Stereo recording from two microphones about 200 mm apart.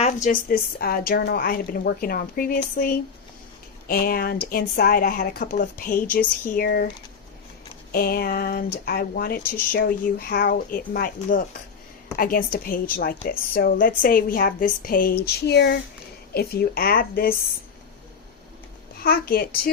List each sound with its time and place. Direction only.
0.0 s speech: 40° left (ahead or behind)
7.9 s speech: 45° left (ahead or behind)
15.2 s a sound: 55° left (ahead or behind)
16.3 s speech: 50° left (ahead or behind)
18.9 s speech: 50° left (ahead or behind)